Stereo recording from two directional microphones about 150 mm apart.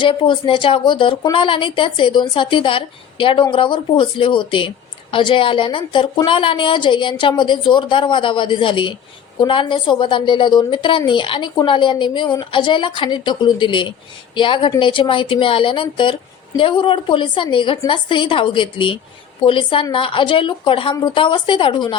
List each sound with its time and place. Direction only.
0.0 s speech: 35° left (ahead or behind)